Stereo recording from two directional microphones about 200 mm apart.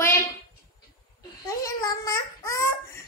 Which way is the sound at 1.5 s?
15° left (ahead or behind).